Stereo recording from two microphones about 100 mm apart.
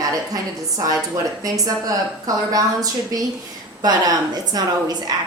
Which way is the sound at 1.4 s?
35° right (ahead or behind).